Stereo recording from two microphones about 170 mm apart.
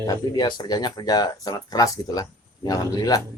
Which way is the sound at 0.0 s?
20° left (ahead or behind).